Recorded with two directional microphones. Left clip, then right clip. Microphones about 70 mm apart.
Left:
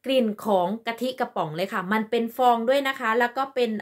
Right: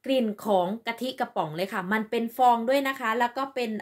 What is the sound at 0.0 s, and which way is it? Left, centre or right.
A woman's voice, left.